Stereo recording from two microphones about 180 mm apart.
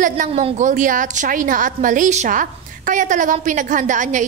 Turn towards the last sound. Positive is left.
turn(degrees=-45)  # may be behind; listen again after turning